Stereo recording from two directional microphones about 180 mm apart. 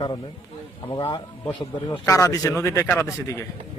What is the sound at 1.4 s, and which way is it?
A man's voice, 20° left (ahead or behind).